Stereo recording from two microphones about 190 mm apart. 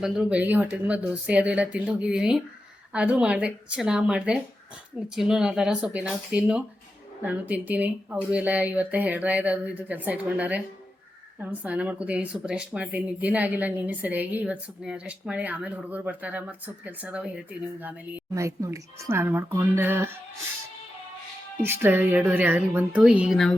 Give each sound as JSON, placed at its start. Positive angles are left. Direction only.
{"t": 0.0, "sound": "speech", "side_deg": -5}
{"t": 21.6, "sound": "speech", "side_deg": -10}